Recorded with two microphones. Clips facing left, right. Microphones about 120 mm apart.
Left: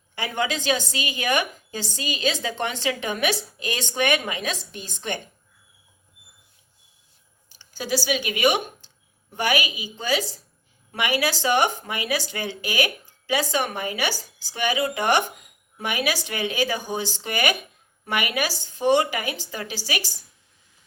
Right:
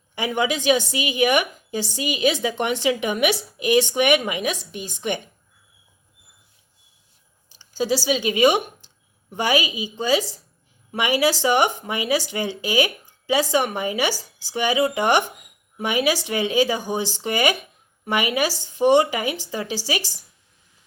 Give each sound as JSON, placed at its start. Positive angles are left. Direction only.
{"t": 0.2, "sound": "a woman's voice", "side_deg": -15}
{"t": 8.0, "sound": "speech", "side_deg": -30}